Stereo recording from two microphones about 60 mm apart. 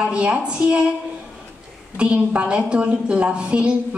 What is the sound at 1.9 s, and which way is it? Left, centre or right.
A woman's voice, centre.